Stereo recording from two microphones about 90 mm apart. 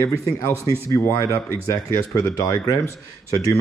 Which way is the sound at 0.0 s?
35° left (ahead or behind).